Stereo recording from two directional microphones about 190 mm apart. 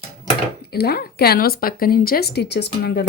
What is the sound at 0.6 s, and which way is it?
Speech, 55° left (ahead or behind).